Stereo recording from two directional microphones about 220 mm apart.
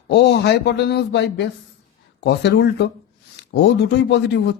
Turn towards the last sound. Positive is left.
turn(degrees=50)  # may be behind; listen again after turning